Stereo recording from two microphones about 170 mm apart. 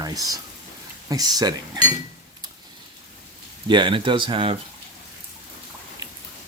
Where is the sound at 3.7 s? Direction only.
30° right (ahead or behind).